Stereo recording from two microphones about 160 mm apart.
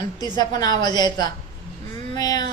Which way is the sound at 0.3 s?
25° left (ahead or behind).